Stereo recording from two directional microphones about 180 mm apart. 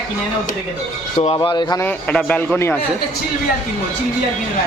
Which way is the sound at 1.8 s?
10° left (ahead or behind).